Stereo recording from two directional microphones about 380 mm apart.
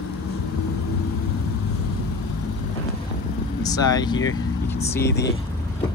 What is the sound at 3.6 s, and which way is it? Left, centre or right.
Speech, centre.